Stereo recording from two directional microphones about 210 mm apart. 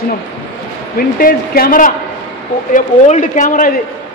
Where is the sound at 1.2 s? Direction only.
40° left (ahead or behind).